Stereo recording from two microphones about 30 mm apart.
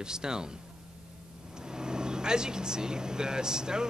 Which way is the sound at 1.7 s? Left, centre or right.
Right.